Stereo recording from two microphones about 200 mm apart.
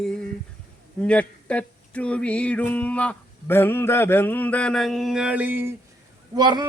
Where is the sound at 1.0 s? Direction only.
5° left (ahead or behind); by 5.7 s 10° right (ahead or behind).